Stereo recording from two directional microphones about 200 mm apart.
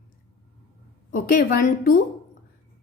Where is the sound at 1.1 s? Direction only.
45° left (ahead or behind).